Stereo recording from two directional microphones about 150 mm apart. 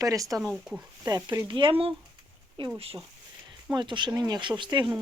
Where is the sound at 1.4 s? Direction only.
35° right (ahead or behind).